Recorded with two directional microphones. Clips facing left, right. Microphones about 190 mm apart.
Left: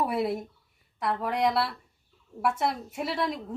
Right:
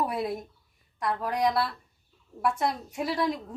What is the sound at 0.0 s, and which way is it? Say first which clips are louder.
A woman's voice: left 2 dB; 5° left (ahead or behind).